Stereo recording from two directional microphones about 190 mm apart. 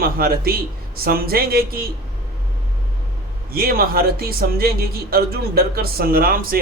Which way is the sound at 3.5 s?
50° right (ahead or behind).